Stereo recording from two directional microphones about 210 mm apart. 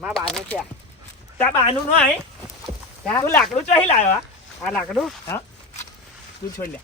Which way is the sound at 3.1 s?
20° left (ahead or behind).